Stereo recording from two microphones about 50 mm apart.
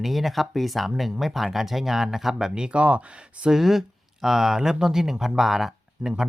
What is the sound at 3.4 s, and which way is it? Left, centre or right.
Speech, centre.